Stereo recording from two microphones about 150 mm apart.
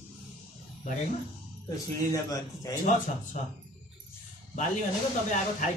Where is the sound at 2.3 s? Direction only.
25° left (ahead or behind).